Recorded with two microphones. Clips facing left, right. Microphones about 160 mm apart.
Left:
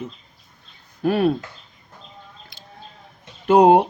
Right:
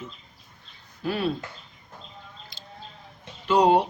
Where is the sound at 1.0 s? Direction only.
55° left (ahead or behind).